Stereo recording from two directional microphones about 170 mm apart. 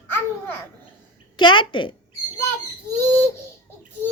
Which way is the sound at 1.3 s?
30° left (ahead or behind).